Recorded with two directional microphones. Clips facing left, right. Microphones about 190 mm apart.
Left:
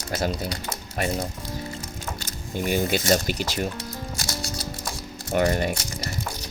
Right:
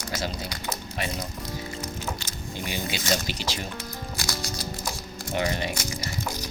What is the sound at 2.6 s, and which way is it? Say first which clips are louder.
Speech: left 7 dB; 50° left (ahead or behind).